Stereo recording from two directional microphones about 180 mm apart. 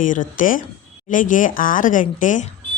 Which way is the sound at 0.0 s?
45° left (ahead or behind).